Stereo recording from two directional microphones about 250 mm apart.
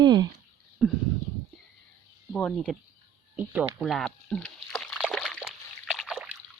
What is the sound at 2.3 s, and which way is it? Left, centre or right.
Speech, centre.